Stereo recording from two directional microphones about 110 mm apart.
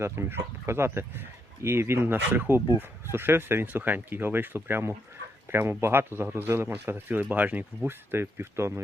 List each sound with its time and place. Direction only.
0.0 s speech: 20° right (ahead or behind)